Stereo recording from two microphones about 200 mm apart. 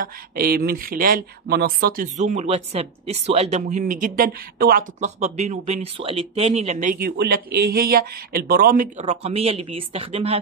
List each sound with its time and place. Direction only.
0.0 s speech: 50° right (ahead or behind); by 10.4 s 30° right (ahead or behind)